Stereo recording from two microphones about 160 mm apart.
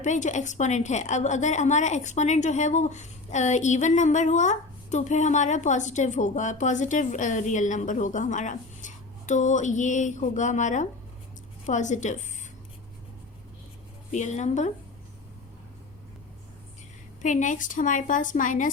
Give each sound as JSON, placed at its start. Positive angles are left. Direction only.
{"t": 0.0, "sound": "a woman's voice", "side_deg": 50}
{"t": 14.1, "sound": "a woman's voice", "side_deg": 50}
{"t": 17.2, "sound": "a woman's voice", "side_deg": 50}